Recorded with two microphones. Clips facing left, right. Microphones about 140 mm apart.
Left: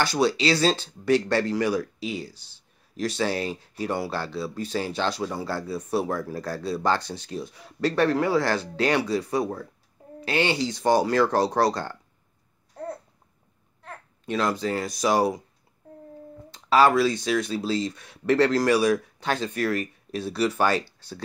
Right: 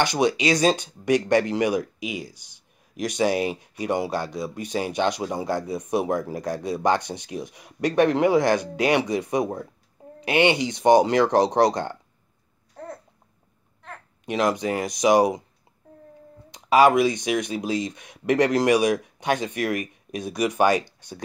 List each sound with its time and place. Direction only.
0.0 s speech: 20° right (ahead or behind)
14.2 s speech: 15° right (ahead or behind)
16.4 s speech: 15° right (ahead or behind)